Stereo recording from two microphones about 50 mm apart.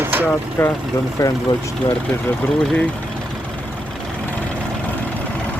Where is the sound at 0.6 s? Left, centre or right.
Left.